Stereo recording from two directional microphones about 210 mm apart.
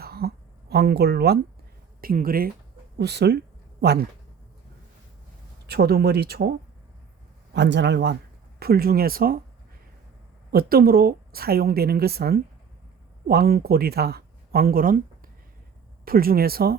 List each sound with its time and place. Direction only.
0.0 s a sound: 45° right (ahead or behind)
2.0 s a woman's voice: 45° right (ahead or behind)
5.6 s a woman's voice: 50° right (ahead or behind)
7.5 s a man's voice: 55° right (ahead or behind)
10.5 s a woman's voice: 45° right (ahead or behind)